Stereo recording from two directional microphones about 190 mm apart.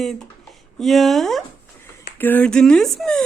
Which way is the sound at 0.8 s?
Centre (ahead or behind).